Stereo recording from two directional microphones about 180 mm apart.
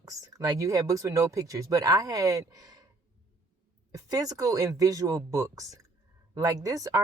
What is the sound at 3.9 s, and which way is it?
Speech, 20° right (ahead or behind).